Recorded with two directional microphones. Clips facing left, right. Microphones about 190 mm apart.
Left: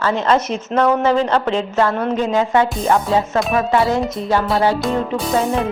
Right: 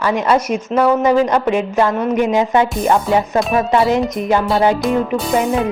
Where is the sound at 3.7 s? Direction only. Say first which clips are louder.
Right 3 dB; 20° right (ahead or behind).